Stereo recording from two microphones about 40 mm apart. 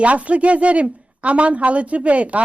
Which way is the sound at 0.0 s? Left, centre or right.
Right.